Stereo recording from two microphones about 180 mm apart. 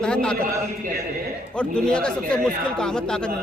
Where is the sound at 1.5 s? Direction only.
5° left (ahead or behind).